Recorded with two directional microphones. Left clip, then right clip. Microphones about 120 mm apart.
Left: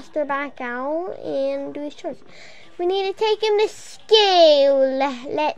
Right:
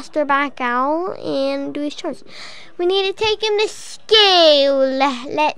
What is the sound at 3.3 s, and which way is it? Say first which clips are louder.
A child's voice: right 1 dB; 45° right (ahead or behind).